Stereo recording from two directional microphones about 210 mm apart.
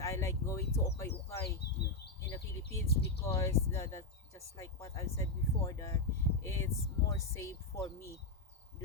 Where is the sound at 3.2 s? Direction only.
15° left (ahead or behind).